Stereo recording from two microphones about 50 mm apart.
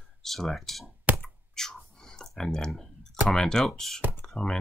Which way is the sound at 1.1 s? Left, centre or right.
Right.